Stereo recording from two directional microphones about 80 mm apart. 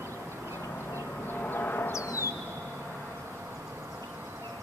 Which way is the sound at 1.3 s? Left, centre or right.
Left.